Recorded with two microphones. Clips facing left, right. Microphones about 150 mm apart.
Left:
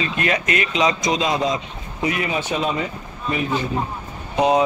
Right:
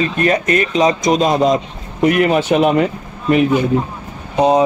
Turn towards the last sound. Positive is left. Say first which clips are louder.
# right 4 dB
turn(degrees=-30)  # may be behind; listen again after turning